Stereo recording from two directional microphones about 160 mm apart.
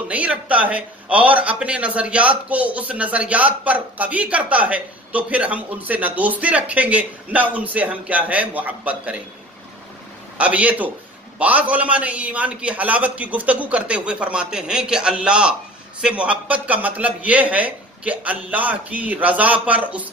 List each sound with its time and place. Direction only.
0.1 s a man's voice: 10° right (ahead or behind)
10.3 s a man's voice: 10° right (ahead or behind)